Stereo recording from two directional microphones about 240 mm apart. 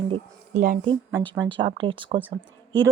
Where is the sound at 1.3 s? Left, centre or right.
Centre.